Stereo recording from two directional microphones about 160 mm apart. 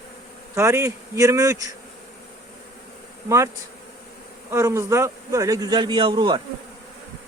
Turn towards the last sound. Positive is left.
turn(degrees=-30)  # may be behind; listen again after turning